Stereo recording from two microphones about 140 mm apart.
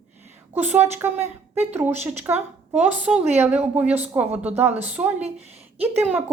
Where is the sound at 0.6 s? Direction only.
15° right (ahead or behind).